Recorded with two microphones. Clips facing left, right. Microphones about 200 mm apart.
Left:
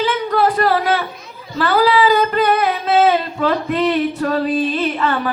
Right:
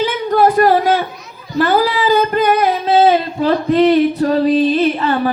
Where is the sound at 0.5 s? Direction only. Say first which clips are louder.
Right 4 dB; 45° right (ahead or behind).